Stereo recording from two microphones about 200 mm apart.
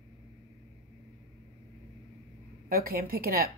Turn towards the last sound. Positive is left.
turn(degrees=-50)  # may be behind; listen again after turning